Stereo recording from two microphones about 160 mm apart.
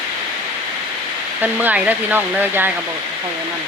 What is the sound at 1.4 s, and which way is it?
Speech, 10° right (ahead or behind).